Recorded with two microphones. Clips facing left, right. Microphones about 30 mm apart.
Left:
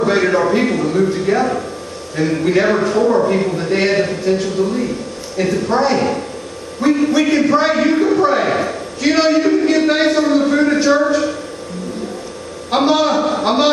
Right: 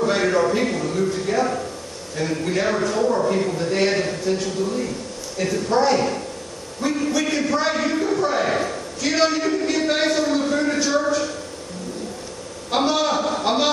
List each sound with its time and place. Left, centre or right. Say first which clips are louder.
0.0 s a man's voice: left 5 dB; left
12.7 s a man's voice: left 6 dB; left